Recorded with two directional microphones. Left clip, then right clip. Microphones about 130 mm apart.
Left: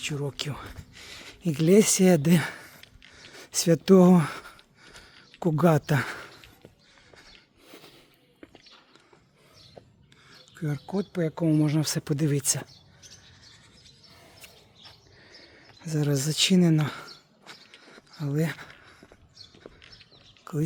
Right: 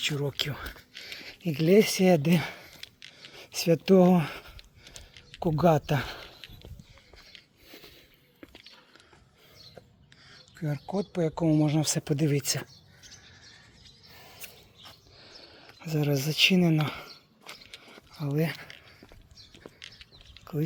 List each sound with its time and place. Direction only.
0.0 s speech: 5° left (ahead or behind)
0.3 s speech: 20° left (ahead or behind)
1.0 s speech: 35° left (ahead or behind)
3.2 s a sound: 50° left (ahead or behind)
5.4 s speech: 50° left (ahead or behind)
7.2 s biting: 45° left (ahead or behind)
10.5 s speech: 15° left (ahead or behind)
14.2 s a sound: centre (ahead or behind)
15.2 s a sound: 25° left (ahead or behind); by 18.9 s 40° left (ahead or behind)
20.4 s chewing: 35° left (ahead or behind)